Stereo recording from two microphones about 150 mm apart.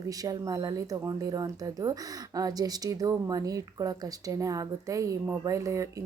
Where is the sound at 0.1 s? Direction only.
25° right (ahead or behind).